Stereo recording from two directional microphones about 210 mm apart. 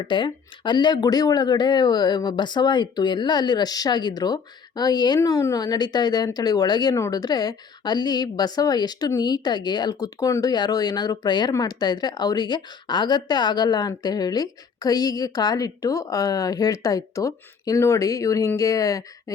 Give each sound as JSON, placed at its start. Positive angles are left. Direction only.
{"t": 0.1, "sound": "speech", "side_deg": 20}